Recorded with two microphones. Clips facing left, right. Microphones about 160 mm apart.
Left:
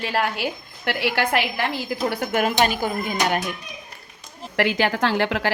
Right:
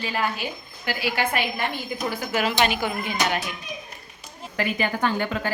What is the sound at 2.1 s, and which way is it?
Speech, 55° left (ahead or behind).